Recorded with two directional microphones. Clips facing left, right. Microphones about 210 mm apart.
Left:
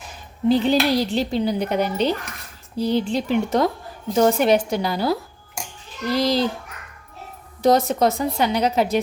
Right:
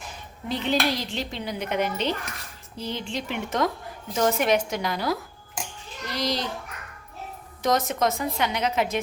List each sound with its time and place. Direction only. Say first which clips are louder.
0.4 s speech: left 8 dB; 35° left (ahead or behind)
7.6 s speech: left 6 dB; 35° left (ahead or behind)